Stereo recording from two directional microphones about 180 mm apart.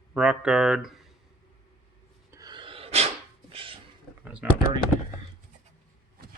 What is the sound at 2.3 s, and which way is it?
Sneeze, 20° right (ahead or behind).